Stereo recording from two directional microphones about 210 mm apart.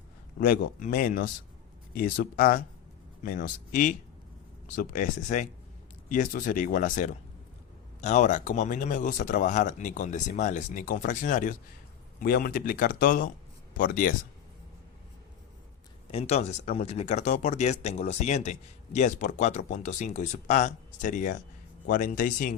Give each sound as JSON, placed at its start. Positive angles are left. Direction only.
{"t": 0.3, "sound": "speech", "side_deg": 45}
{"t": 16.1, "sound": "speech", "side_deg": 30}